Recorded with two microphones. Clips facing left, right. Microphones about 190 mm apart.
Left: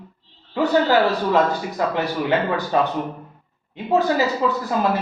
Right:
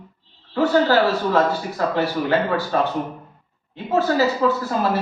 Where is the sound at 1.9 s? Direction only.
15° left (ahead or behind).